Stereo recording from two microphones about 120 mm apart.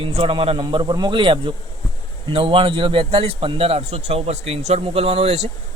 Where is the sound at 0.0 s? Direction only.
50° right (ahead or behind).